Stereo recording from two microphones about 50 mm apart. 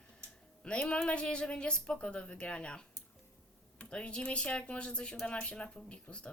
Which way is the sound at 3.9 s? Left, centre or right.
Centre.